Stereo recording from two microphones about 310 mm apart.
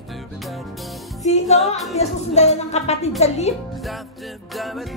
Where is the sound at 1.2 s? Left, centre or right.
Left.